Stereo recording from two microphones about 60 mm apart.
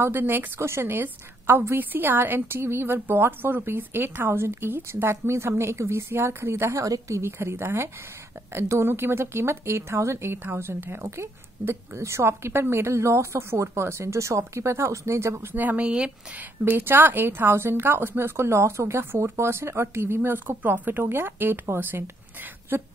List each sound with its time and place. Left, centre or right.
0.0 s a woman's voice: right
7.2 s a woman's voice: right
15.5 s a woman's voice: right
20.2 s a woman's voice: right